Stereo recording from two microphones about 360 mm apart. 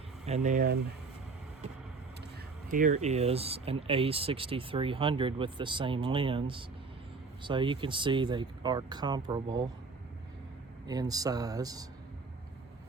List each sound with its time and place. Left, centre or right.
0.3 s speech: centre
2.6 s speech: right
10.8 s speech: centre